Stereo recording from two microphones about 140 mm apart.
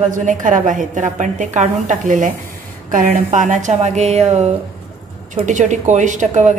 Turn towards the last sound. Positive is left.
turn(degrees=-65)  # may be behind; listen again after turning